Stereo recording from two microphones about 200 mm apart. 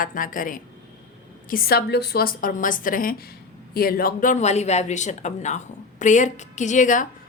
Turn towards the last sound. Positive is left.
turn(degrees=40)  # may be behind; listen again after turning